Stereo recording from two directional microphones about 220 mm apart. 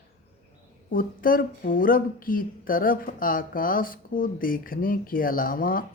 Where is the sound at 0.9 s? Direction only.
40° left (ahead or behind).